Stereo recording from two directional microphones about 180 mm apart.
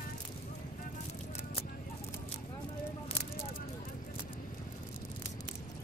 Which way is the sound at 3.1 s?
30° left (ahead or behind).